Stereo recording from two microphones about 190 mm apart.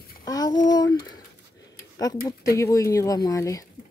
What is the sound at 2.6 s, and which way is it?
Speech, 15° left (ahead or behind).